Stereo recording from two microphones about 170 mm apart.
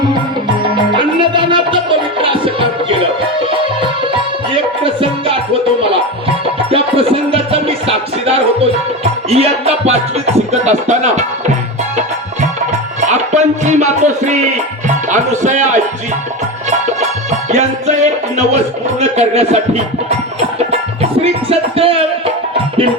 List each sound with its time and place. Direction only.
0.9 s music: 30° right (ahead or behind)
4.5 s music: 30° right (ahead or behind)
6.7 s music: 35° right (ahead or behind)
13.1 s music: 45° right (ahead or behind)
17.5 s music: 45° right (ahead or behind)